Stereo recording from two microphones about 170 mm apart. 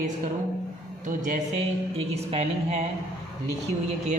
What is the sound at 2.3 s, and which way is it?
Speech, 40° right (ahead or behind).